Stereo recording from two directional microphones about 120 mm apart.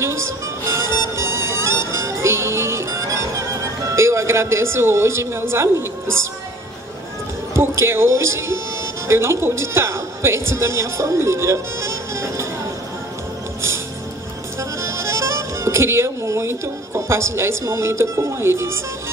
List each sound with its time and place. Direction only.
0.0 s music: 25° right (ahead or behind)
7.5 s a woman's voice: 20° right (ahead or behind)
14.6 s speech: 25° right (ahead or behind)